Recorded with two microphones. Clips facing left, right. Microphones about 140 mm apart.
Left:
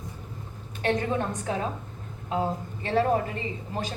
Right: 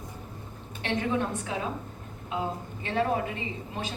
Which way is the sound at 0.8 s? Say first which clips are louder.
Left 2 dB; 40° left (ahead or behind).